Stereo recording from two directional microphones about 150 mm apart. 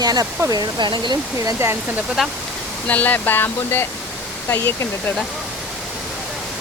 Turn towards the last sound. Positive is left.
turn(degrees=15)  # may be behind; listen again after turning